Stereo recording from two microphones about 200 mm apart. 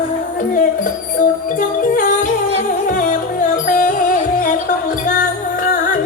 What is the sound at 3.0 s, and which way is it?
Music, 40° left (ahead or behind).